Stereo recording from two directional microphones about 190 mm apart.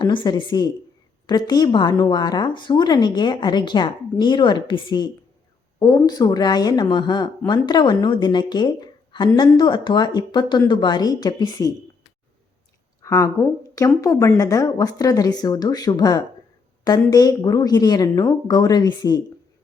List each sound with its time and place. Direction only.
0.0 s speech: 25° left (ahead or behind)
13.0 s speech: 15° left (ahead or behind)